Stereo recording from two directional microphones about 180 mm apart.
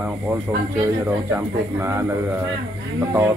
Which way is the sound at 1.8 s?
15° right (ahead or behind).